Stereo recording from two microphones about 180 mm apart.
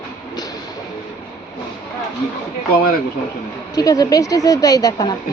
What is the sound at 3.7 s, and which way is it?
A woman's voice, 20° left (ahead or behind).